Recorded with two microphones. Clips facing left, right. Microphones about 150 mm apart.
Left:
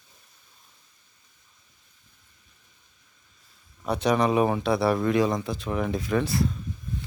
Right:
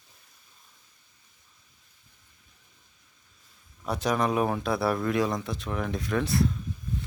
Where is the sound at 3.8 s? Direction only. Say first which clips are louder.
Left 4 dB; centre (ahead or behind).